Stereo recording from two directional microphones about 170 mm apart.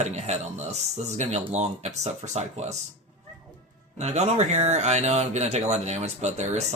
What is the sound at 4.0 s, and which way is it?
Speech, 40° right (ahead or behind).